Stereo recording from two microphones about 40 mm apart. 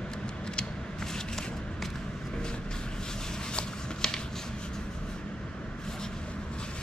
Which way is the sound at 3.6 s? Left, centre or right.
Centre.